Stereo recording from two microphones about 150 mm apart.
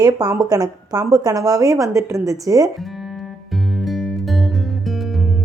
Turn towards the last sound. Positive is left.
turn(degrees=0)  # may be behind; listen again after turning